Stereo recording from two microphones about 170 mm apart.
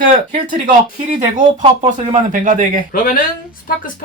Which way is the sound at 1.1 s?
45° right (ahead or behind).